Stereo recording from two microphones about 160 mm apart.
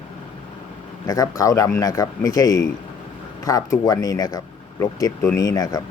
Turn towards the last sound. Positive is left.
turn(degrees=25)  # may be behind; listen again after turning